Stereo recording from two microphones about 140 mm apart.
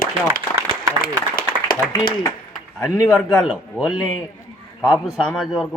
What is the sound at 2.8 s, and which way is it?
A man's voice, centre (ahead or behind).